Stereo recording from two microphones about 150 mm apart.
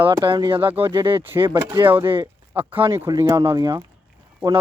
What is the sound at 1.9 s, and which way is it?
Speech, 15° right (ahead or behind).